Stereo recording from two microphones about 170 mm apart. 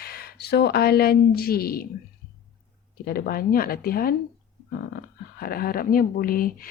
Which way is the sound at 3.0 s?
65° left (ahead or behind).